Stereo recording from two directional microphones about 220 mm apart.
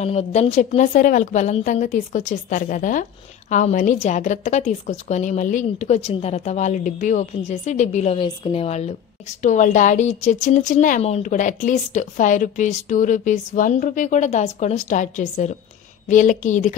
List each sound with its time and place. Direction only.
0.0 s a woman's voice: 30° left (ahead or behind)